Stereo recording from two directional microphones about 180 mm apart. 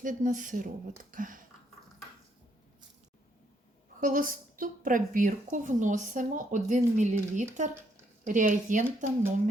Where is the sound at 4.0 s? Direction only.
50° right (ahead or behind).